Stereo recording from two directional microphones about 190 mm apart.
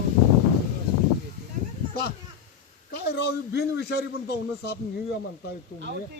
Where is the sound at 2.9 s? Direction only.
55° left (ahead or behind).